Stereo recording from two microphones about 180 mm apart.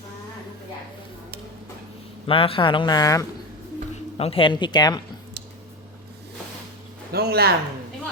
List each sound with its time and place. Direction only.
2.2 s speech: 30° left (ahead or behind)
4.2 s speech: 30° left (ahead or behind)
7.1 s speech: 60° right (ahead or behind)